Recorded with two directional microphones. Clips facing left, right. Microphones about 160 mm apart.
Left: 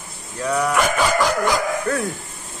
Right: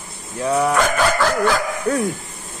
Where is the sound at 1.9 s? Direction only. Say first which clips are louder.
Right 5 dB; 15° right (ahead or behind).